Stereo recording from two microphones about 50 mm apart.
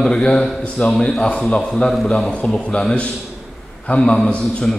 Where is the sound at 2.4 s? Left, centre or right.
Left.